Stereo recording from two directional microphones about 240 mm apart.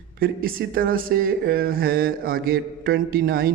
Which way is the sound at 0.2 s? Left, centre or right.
Right.